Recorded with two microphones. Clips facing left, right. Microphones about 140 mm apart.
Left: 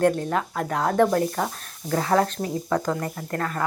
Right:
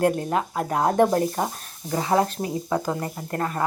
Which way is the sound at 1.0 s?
25° right (ahead or behind).